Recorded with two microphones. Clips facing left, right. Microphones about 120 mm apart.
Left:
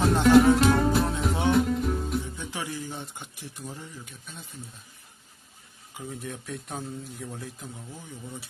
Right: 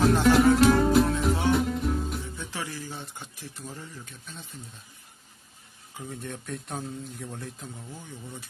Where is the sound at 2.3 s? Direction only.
15° left (ahead or behind).